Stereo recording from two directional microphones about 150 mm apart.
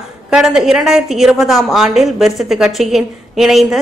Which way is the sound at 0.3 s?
5° right (ahead or behind).